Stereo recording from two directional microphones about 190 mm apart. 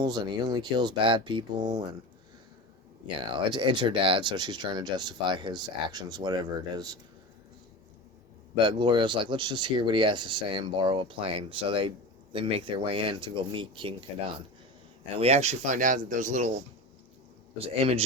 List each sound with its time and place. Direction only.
0.0 s speech: 20° right (ahead or behind)
3.2 s speech: 25° right (ahead or behind)
8.5 s speech: 25° right (ahead or behind)
15.2 s speech: 35° right (ahead or behind)
17.7 s speech: 30° right (ahead or behind)